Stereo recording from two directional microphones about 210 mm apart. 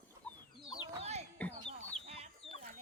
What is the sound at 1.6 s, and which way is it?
Chicken, 30° right (ahead or behind).